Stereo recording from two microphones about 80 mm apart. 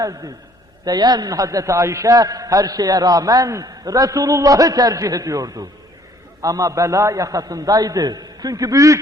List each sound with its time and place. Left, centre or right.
0.0 s a man's voice: right